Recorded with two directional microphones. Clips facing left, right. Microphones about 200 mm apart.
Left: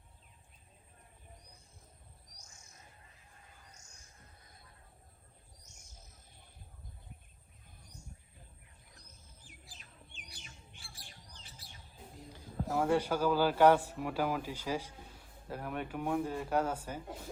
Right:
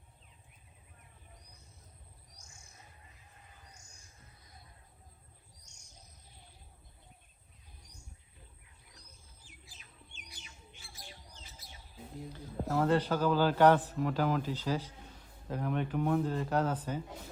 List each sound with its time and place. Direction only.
9.0 s squawk: 55° left (ahead or behind)
12.3 s a man's voice: 10° left (ahead or behind)